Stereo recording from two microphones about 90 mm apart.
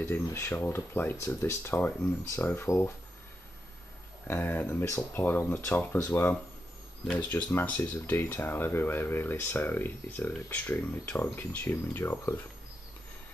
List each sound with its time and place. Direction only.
0.0 s speech: 30° left (ahead or behind)
4.3 s speech: 20° left (ahead or behind)
7.2 s speech: 20° left (ahead or behind)